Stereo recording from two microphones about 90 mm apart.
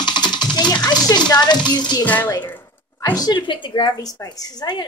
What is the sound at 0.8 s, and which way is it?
A woman's voice, 50° left (ahead or behind).